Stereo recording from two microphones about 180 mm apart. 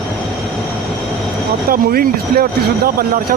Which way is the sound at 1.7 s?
55° right (ahead or behind).